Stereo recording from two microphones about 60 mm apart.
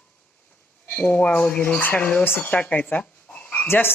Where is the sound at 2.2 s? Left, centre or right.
Left.